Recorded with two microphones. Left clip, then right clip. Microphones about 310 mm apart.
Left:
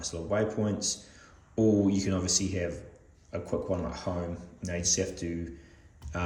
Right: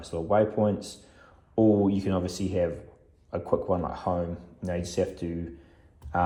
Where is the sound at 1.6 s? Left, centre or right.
Right.